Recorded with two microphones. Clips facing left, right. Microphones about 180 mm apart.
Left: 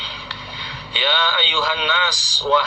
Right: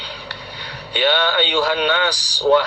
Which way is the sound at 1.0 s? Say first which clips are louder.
Right 5 dB; 50° right (ahead or behind).